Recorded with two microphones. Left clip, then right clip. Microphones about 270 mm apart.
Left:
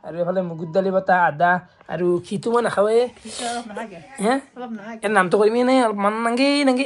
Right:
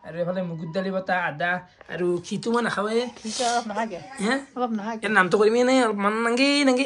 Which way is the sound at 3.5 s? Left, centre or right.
Right.